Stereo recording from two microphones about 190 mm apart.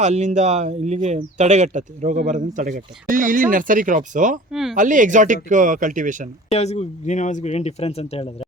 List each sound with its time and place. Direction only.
0.0 s speech: 40° right (ahead or behind)
6.5 s speech: 35° left (ahead or behind)